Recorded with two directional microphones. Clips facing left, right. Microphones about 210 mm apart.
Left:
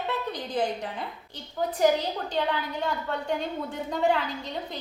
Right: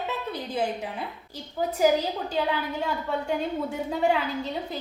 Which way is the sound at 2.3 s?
10° right (ahead or behind).